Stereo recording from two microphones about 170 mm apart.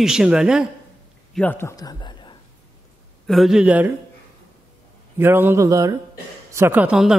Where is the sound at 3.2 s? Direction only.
Centre (ahead or behind).